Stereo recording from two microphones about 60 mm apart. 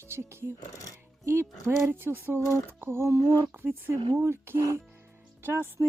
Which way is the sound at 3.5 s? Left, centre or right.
Right.